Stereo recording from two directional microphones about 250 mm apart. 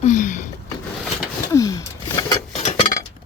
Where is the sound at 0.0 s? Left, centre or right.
Left.